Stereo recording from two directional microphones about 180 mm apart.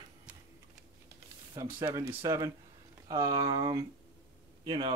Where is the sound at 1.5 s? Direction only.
10° right (ahead or behind).